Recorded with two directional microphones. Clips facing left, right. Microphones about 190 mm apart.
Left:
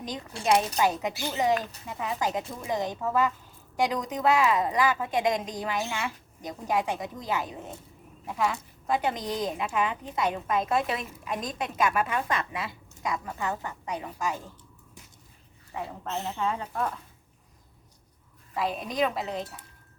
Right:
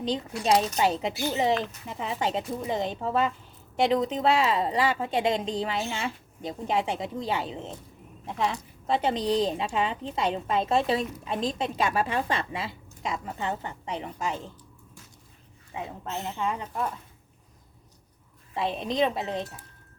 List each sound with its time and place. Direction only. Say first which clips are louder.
0.8 s a woman's voice: right 1 dB; 25° right (ahead or behind)
8.9 s a woman's voice: right 3 dB; 25° right (ahead or behind)
15.7 s a woman's voice: left 1 dB; 15° right (ahead or behind)
18.5 s a woman's voice: right 2 dB; 25° right (ahead or behind)